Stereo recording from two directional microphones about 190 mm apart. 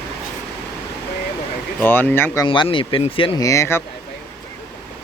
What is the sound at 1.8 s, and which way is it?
Speech, 10° left (ahead or behind).